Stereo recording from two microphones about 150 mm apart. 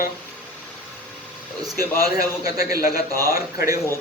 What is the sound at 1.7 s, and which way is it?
Speech, 75° left (ahead or behind).